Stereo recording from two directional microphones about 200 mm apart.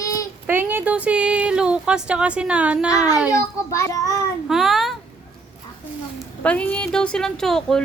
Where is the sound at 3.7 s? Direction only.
15° left (ahead or behind).